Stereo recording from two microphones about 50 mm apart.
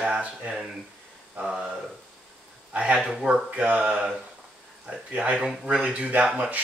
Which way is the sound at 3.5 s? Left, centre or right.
Right.